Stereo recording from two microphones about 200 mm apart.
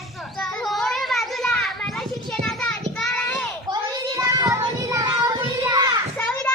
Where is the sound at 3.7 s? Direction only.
20° right (ahead or behind).